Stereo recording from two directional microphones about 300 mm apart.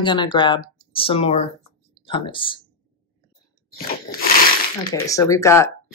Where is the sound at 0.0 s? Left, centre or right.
Centre.